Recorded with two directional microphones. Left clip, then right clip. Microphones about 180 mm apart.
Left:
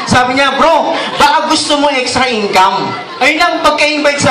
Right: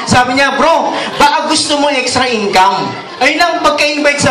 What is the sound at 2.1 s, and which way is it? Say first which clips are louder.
Speech: even; 30° right (ahead or behind).